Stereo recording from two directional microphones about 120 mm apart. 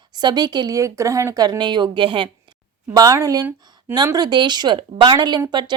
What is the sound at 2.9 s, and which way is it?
Speech, 30° right (ahead or behind).